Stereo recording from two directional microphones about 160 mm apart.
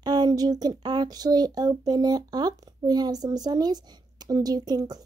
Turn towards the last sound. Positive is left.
turn(degrees=-25)  # may be behind; listen again after turning